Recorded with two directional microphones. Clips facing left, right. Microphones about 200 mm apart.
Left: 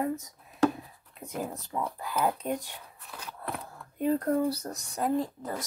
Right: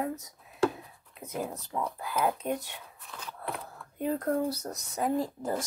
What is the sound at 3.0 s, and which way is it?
Scissors, 10° left (ahead or behind).